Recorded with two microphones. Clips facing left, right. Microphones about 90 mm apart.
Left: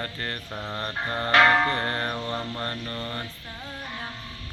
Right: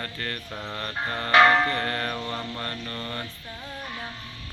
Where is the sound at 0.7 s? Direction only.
25° left (ahead or behind).